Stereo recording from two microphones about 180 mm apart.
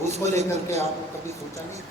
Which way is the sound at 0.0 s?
40° right (ahead or behind).